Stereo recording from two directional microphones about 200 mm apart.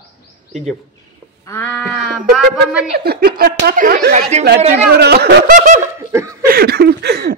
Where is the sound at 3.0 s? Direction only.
50° right (ahead or behind); by 4.9 s 35° right (ahead or behind).